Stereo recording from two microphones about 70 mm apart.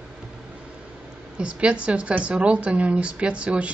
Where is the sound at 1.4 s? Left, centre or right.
Centre.